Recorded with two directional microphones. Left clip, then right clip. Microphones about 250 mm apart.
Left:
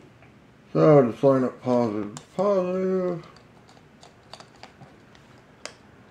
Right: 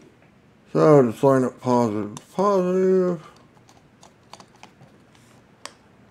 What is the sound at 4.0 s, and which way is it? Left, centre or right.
Clip-clop, centre.